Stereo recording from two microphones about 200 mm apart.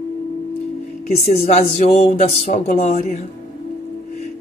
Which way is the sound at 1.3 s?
30° left (ahead or behind).